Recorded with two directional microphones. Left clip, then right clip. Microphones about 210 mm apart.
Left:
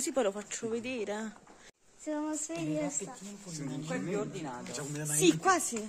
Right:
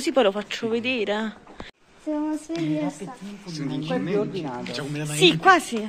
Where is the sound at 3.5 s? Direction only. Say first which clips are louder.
Right 11 dB; 55° left (ahead or behind).